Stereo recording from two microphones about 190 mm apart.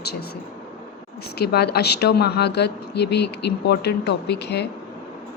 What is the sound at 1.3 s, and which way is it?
Speech, 55° left (ahead or behind).